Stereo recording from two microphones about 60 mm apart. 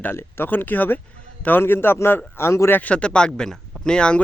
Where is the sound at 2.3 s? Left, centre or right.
Left.